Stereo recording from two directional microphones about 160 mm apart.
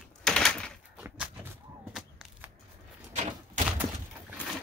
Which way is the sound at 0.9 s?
10° right (ahead or behind).